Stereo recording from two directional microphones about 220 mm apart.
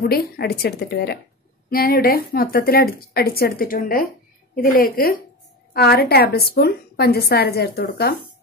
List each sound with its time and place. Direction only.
0.0 s a woman's voice: 45° left (ahead or behind)